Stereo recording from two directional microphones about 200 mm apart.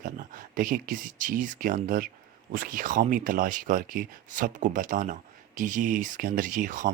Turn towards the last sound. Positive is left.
turn(degrees=-40)  # may be behind; listen again after turning